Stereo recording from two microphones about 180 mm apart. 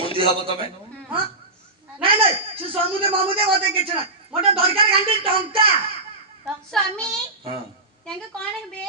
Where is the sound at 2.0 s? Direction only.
30° right (ahead or behind).